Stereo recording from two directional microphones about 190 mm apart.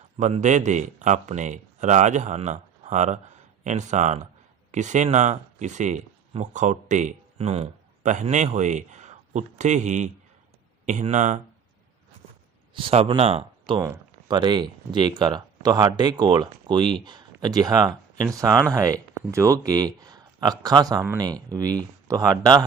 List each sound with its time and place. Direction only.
0.2 s speech: 40° right (ahead or behind)
12.7 s speech: 30° right (ahead or behind)
13.7 s speech: 15° right (ahead or behind)